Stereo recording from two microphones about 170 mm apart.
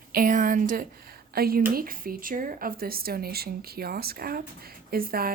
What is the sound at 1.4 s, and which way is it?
A woman's voice, 60° right (ahead or behind).